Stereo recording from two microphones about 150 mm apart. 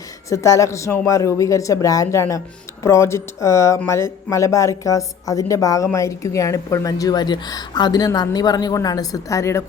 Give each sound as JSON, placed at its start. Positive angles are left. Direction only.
{"t": 0.3, "sound": "a woman's voice", "side_deg": 20}